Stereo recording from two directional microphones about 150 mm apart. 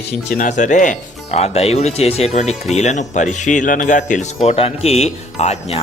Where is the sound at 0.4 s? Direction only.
55° left (ahead or behind).